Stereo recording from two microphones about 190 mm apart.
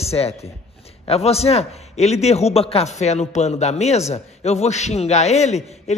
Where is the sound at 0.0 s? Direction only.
35° left (ahead or behind).